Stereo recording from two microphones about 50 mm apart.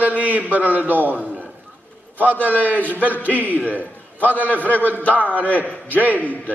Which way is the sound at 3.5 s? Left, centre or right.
Left.